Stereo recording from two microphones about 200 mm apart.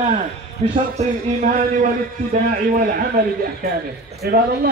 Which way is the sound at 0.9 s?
40° right (ahead or behind).